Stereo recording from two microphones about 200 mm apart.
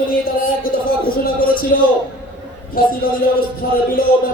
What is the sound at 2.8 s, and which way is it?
A man's voice, 45° left (ahead or behind).